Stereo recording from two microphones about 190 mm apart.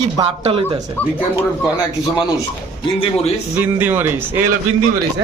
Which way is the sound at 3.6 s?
10° right (ahead or behind).